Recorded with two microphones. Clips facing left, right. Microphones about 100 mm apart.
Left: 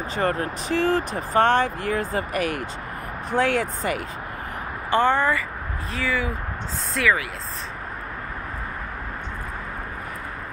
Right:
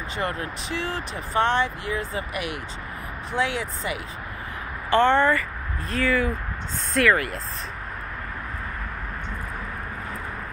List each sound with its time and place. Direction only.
0.1 s speech: 40° left (ahead or behind)
5.0 s speech: 5° left (ahead or behind)